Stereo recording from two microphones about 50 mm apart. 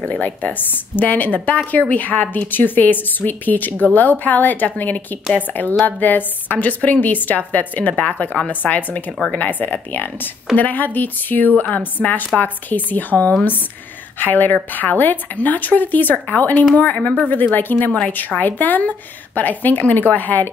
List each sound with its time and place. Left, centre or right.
0.0 s speech: left